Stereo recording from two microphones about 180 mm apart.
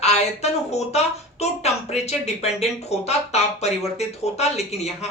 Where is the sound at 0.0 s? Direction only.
35° left (ahead or behind).